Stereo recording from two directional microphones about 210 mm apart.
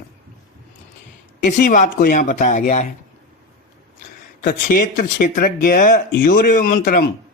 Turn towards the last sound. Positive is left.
turn(degrees=40)  # may be behind; listen again after turning